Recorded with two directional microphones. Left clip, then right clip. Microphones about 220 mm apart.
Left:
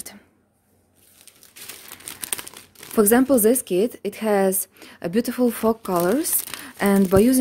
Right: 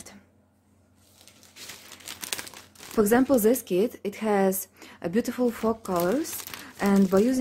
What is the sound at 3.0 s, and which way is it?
A woman's voice, 30° left (ahead or behind).